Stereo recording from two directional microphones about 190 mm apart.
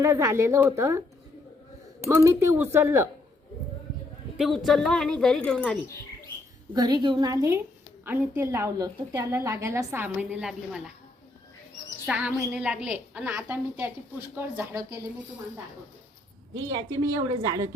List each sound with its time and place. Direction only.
0.0 s a woman's voice: 15° right (ahead or behind)
4.4 s speech: centre (ahead or behind)
6.7 s a woman's voice: 20° right (ahead or behind); by 10.9 s 5° right (ahead or behind)
12.0 s a woman's voice: 5° right (ahead or behind)
16.7 s a woman's voice: 20° right (ahead or behind)